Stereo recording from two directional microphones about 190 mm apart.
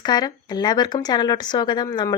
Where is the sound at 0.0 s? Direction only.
20° left (ahead or behind).